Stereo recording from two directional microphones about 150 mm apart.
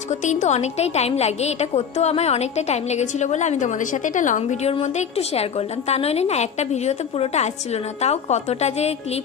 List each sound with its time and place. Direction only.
0.1 s a woman's voice: 50° left (ahead or behind)